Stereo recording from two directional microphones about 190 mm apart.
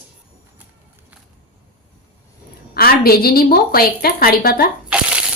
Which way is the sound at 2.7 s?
55° left (ahead or behind).